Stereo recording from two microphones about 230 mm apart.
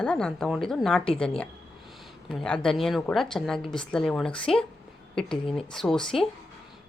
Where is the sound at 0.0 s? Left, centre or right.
Centre.